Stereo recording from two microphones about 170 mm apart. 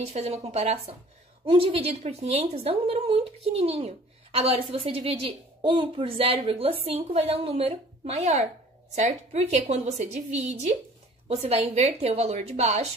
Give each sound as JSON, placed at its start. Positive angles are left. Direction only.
{"t": 0.0, "sound": "a woman's voice", "side_deg": -40}